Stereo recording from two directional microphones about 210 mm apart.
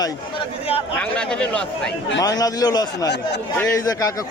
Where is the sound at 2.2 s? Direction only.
15° left (ahead or behind).